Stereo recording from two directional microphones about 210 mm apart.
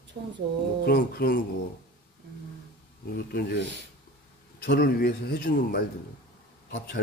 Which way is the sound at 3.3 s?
50° left (ahead or behind).